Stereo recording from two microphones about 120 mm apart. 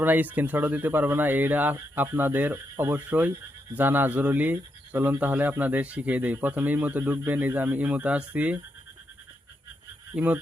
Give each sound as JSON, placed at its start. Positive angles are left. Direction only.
{"t": 0.0, "sound": "speech", "side_deg": -15}
{"t": 10.2, "sound": "speech", "side_deg": -15}